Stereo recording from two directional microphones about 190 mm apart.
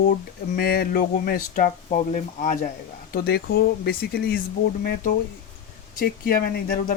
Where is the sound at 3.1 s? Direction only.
55° left (ahead or behind).